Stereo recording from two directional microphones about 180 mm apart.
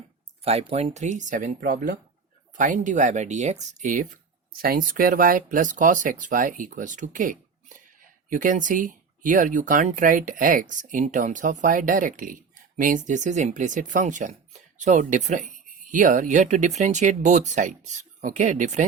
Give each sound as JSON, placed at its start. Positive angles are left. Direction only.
{"t": 0.4, "sound": "speech", "side_deg": -35}
{"t": 4.5, "sound": "speech", "side_deg": -55}